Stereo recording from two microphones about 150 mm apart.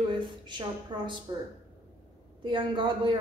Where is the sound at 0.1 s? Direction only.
30° right (ahead or behind).